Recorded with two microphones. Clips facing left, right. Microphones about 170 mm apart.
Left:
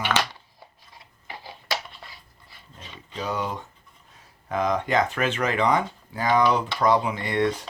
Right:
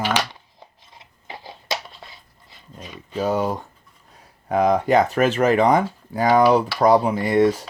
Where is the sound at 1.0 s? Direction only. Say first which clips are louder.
Right 3 dB; 20° right (ahead or behind).